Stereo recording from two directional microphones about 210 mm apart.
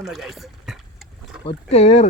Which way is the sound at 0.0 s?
Centre (ahead or behind).